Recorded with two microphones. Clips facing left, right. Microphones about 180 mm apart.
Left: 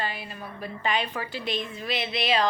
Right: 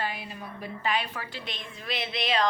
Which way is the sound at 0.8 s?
5° right (ahead or behind).